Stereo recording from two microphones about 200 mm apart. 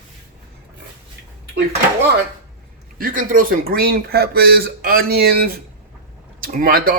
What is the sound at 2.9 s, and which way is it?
Speech, 45° right (ahead or behind).